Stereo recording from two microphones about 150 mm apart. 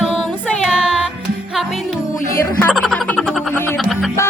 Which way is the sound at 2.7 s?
Centre (ahead or behind).